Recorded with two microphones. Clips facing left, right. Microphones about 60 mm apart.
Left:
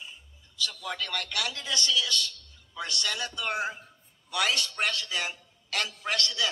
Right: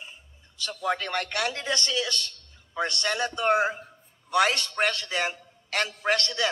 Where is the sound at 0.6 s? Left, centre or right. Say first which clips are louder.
Right 6 dB; right.